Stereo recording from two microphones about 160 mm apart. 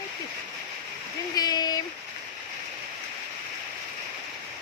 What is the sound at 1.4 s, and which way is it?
Speech, 25° left (ahead or behind).